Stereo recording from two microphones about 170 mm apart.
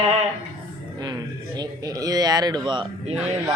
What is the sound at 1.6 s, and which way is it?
A man's voice, 20° right (ahead or behind).